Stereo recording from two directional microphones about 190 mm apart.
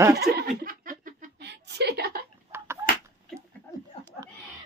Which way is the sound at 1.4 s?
60° right (ahead or behind).